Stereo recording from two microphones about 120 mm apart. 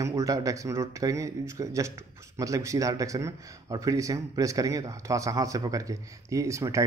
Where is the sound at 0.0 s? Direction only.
25° right (ahead or behind).